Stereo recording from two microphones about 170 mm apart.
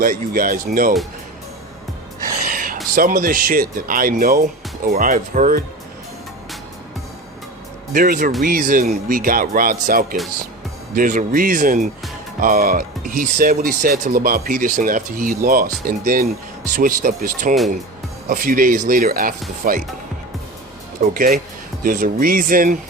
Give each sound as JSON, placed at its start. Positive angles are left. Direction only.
{"t": 0.0, "sound": "speech", "side_deg": -55}
{"t": 2.2, "sound": "music", "side_deg": -55}
{"t": 2.9, "sound": "speech", "side_deg": -55}
{"t": 7.9, "sound": "speech", "side_deg": -55}
{"t": 21.0, "sound": "speech", "side_deg": -55}